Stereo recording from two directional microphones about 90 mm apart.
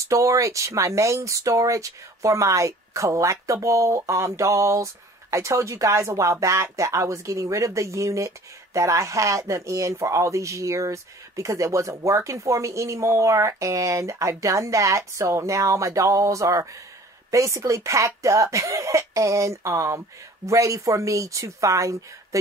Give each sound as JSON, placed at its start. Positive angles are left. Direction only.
{"t": 0.0, "sound": "speech", "side_deg": -35}